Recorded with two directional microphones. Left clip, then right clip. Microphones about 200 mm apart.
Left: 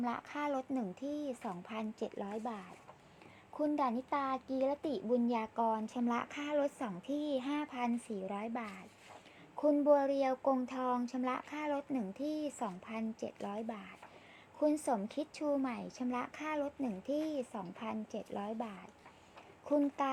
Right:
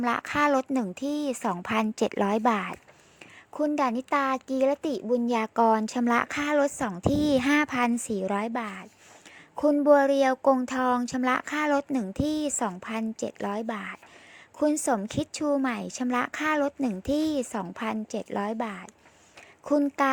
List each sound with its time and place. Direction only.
0.0 s speech: 35° right (ahead or behind)
3.5 s speech: 35° right (ahead or behind)